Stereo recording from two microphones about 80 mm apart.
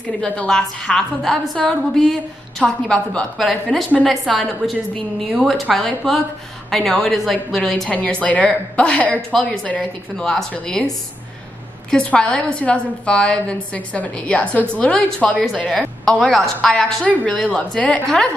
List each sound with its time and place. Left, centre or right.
0.0 s a woman's voice: centre
7.9 s a woman's voice: centre
11.9 s a woman's voice: centre